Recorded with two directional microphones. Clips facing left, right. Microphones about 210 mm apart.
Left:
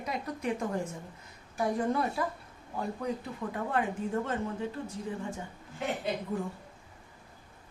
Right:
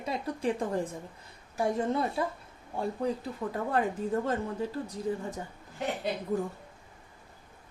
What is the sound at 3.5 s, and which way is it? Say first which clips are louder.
A woman's voice: right 2 dB; 40° right (ahead or behind).